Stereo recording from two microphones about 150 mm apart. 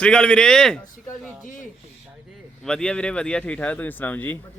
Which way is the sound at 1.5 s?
60° left (ahead or behind).